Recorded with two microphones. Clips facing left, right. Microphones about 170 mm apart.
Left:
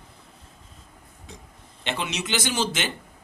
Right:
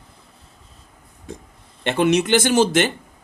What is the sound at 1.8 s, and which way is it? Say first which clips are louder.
Speech: right 12 dB; 55° right (ahead or behind).